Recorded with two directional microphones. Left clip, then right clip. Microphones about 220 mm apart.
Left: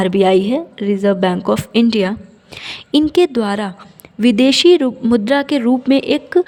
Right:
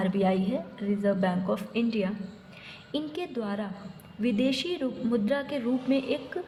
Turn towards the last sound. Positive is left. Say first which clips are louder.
# left 13 dB
turn(degrees=50)  # may be behind; listen again after turning